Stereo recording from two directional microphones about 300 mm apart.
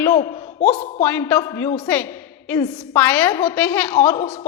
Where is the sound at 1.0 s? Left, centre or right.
Centre.